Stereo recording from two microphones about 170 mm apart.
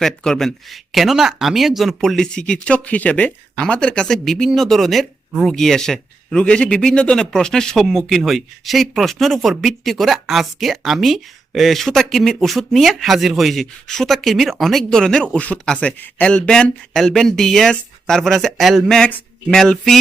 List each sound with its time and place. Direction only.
0.0 s speech: 5° left (ahead or behind)